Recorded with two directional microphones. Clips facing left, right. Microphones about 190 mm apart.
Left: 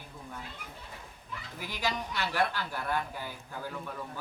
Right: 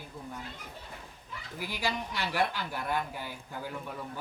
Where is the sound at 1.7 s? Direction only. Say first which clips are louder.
Even; 10° right (ahead or behind).